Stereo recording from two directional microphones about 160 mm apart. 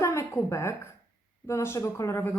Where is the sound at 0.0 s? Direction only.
20° left (ahead or behind).